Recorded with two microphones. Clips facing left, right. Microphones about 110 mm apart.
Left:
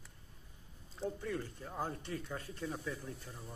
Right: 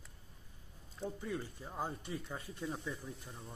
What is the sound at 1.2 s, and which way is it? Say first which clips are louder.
Speech: left 1 dB; 15° right (ahead or behind).